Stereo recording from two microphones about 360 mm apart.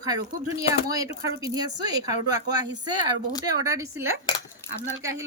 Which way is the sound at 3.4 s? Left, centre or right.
Centre.